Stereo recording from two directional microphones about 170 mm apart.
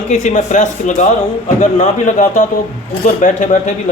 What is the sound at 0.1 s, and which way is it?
Speech, 45° left (ahead or behind).